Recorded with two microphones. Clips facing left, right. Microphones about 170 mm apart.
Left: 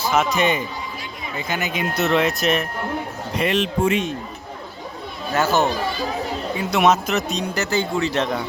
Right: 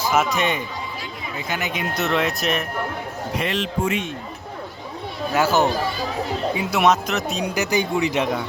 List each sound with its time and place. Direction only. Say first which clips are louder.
0.0 s speech: left 1 dB; 5° right (ahead or behind)
3.5 s speech: left 5 dB; 20° left (ahead or behind)
5.3 s speech: even; 10° right (ahead or behind)
7.4 s speech: right 1 dB; 10° right (ahead or behind)